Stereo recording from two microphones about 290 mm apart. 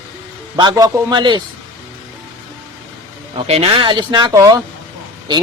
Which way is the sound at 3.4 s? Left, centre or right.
Centre.